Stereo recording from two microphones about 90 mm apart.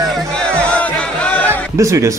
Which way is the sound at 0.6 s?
15° left (ahead or behind).